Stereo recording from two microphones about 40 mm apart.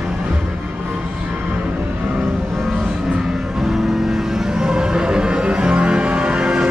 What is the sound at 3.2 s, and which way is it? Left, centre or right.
Music, centre.